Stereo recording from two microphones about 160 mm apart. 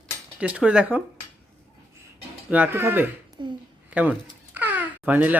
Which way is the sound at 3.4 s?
30° right (ahead or behind).